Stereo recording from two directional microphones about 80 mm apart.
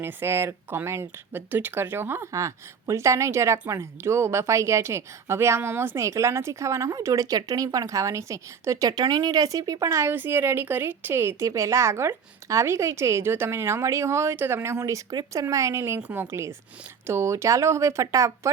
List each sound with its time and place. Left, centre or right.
0.0 s a woman's voice: right
8.9 s speech: right
10.1 s a woman's voice: right
16.0 s speech: centre
16.2 s a woman's voice: right